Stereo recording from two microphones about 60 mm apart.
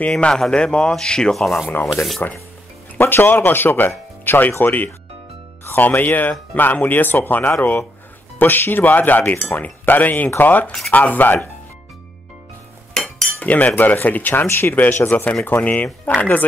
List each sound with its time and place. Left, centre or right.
0.0 s speech: centre
1.4 s speech: centre
2.2 s speech: left
12.9 s cutlery: centre
13.4 s speech: left